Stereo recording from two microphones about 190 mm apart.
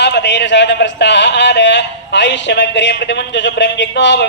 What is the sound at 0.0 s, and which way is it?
A man's voice, 65° left (ahead or behind).